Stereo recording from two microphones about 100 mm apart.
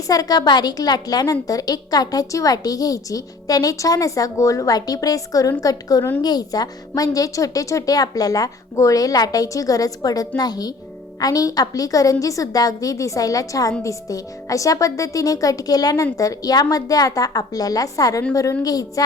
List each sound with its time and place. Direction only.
0.1 s a woman's voice: 40° left (ahead or behind)